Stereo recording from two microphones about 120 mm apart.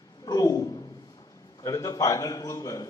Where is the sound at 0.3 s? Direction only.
30° left (ahead or behind).